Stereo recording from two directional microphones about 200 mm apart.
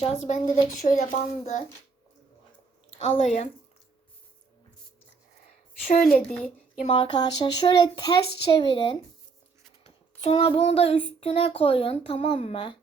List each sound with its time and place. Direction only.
0.0 s a child's voice: 35° left (ahead or behind)
3.0 s a child's voice: 35° left (ahead or behind)
5.9 s a child's voice: 35° left (ahead or behind)
6.2 s speech: 5° left (ahead or behind)
6.8 s child singing: 30° left (ahead or behind)